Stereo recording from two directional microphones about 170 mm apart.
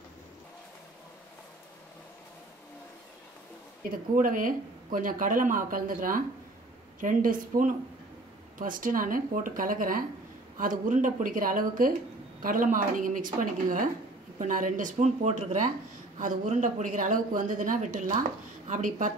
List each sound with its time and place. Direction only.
4.1 s speech: 55° right (ahead or behind)